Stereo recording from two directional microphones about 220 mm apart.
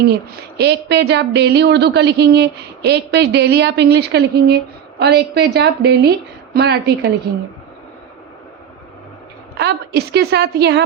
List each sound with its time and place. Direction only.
0.0 s speech: 45° right (ahead or behind)
9.6 s speech: 50° right (ahead or behind)